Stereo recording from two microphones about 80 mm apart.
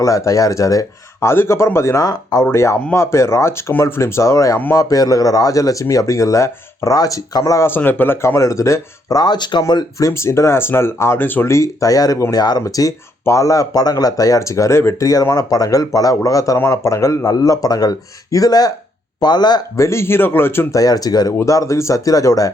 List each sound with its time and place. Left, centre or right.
0.0 s speech: left
7.6 s speech: left
9.2 s speech: left
10.0 s speech: left
11.5 s speech: left
15.0 s speech: left
19.2 s speech: left
19.7 s speech: left
20.7 s speech: left